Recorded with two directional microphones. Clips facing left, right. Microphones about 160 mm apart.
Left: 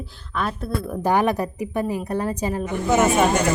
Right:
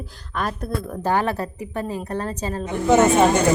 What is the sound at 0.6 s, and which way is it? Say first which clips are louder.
Speech: left 1 dB; 10° left (ahead or behind).